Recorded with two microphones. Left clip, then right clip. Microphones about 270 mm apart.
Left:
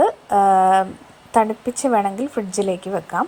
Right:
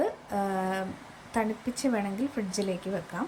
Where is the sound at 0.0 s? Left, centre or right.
Left.